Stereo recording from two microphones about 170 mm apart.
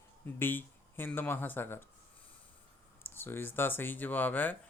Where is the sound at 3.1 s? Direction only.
10° left (ahead or behind).